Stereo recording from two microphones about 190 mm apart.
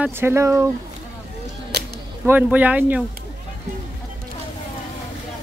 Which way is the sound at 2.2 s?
10° right (ahead or behind).